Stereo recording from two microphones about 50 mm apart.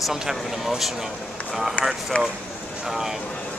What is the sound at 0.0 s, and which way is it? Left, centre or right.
Speech, centre.